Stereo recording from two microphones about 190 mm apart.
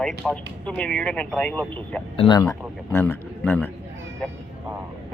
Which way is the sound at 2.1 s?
30° left (ahead or behind).